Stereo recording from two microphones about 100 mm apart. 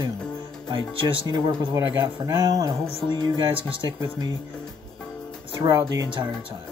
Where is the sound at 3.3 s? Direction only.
55° right (ahead or behind).